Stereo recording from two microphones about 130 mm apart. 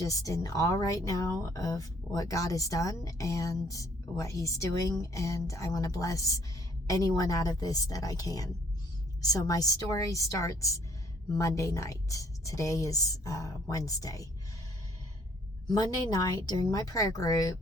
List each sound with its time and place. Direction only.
0.0 s speech: 25° left (ahead or behind)
15.6 s speech: 30° left (ahead or behind)